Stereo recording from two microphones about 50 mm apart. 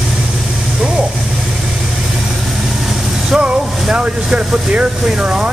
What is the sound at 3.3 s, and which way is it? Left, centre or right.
Speech, centre.